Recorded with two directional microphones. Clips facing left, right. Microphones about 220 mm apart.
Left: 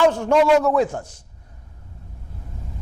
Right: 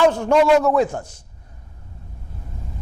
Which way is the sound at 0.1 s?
20° right (ahead or behind).